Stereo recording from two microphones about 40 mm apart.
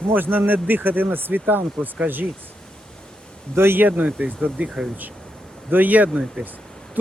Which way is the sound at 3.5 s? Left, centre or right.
Right.